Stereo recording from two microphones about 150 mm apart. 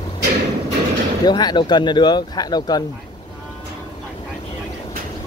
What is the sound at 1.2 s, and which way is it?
Speech, 30° left (ahead or behind).